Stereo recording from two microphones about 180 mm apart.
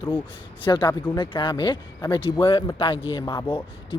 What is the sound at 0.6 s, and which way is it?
Speech, 25° left (ahead or behind).